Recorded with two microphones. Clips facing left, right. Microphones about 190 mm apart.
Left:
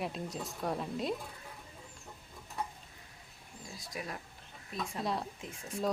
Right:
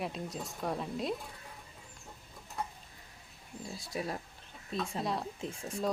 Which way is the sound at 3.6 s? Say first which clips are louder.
Right 5 dB; 30° right (ahead or behind).